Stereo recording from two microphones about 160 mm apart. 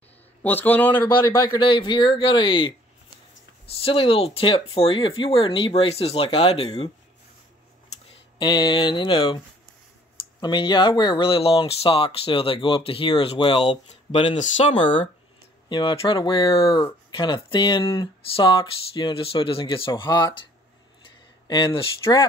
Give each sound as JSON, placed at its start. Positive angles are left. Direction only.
{"t": 0.4, "sound": "a man's voice", "side_deg": 10}
{"t": 1.5, "sound": "speech", "side_deg": 30}
{"t": 8.4, "sound": "a sound", "side_deg": 30}
{"t": 10.4, "sound": "speech", "side_deg": 30}
{"t": 14.3, "sound": "speech", "side_deg": 45}
{"t": 14.8, "sound": "speech", "side_deg": 30}
{"t": 21.5, "sound": "a sound", "side_deg": 25}